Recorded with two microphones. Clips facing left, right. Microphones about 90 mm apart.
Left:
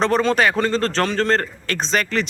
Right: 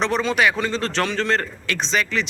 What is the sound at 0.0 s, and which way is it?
Speech, 40° left (ahead or behind).